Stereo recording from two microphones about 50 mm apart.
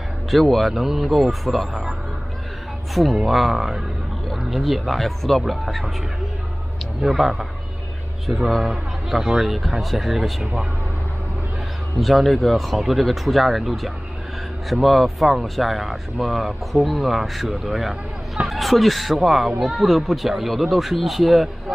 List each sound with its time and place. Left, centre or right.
0.3 s speech: centre
7.0 s speech: centre
10.4 s speech: centre
12.0 s speech: centre